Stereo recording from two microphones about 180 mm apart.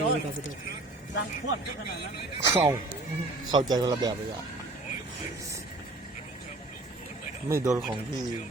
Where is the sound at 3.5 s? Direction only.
20° right (ahead or behind).